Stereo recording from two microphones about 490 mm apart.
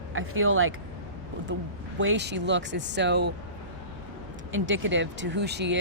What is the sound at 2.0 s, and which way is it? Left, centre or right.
Speech, right.